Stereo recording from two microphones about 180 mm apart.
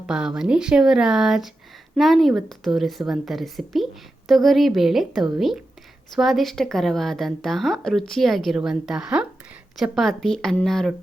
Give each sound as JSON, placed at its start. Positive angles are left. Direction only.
{"t": 0.1, "sound": "a woman's voice", "side_deg": -5}